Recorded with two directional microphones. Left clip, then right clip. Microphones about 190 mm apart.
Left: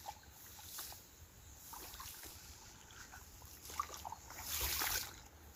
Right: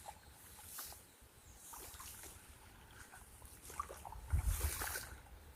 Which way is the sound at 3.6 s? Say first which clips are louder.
Left 3 dB; 50° left (ahead or behind).